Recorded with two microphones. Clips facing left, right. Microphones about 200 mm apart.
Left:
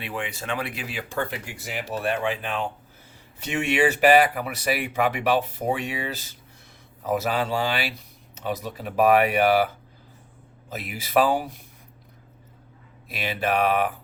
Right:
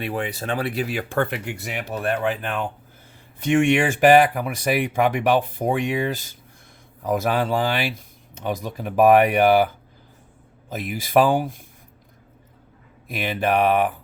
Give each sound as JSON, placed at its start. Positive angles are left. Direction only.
{"t": 0.0, "sound": "speech", "side_deg": -40}
{"t": 10.7, "sound": "speech", "side_deg": -45}
{"t": 13.1, "sound": "speech", "side_deg": -50}